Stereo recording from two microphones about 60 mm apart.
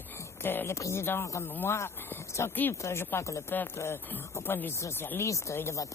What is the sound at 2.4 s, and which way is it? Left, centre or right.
Speech, left.